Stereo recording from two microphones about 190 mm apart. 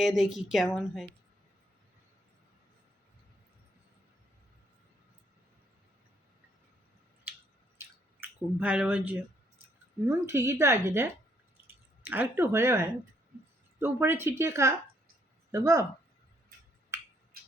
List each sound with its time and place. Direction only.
0.0 s a woman's voice: centre (ahead or behind)
8.2 s a woman's voice: 10° right (ahead or behind)